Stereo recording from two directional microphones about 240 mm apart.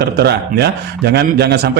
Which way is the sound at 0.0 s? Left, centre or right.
Right.